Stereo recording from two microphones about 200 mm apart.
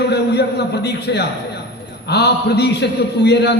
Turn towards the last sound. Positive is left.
turn(degrees=55)  # may be behind; listen again after turning